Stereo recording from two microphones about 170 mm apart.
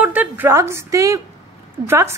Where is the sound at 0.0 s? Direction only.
10° right (ahead or behind).